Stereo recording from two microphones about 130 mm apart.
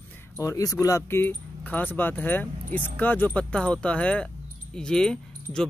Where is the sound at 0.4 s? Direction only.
25° left (ahead or behind).